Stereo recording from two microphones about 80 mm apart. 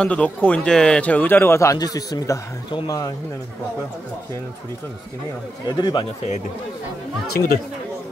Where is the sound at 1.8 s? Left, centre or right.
Left.